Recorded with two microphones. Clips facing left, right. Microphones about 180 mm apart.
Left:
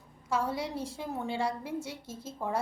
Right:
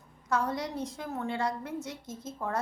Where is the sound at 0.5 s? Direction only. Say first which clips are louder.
Even; 30° left (ahead or behind).